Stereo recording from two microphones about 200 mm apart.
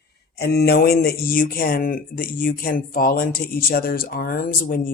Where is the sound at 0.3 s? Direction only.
55° left (ahead or behind).